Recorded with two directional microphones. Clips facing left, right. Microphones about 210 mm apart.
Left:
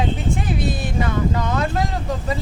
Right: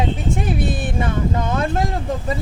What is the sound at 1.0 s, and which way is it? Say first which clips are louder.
Speech: left 1 dB; 25° right (ahead or behind).